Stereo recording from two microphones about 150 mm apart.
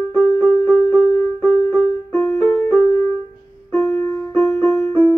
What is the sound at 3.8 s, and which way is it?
Music, 15° left (ahead or behind).